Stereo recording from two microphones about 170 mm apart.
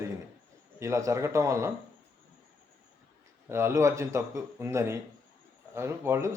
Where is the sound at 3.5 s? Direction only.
15° right (ahead or behind).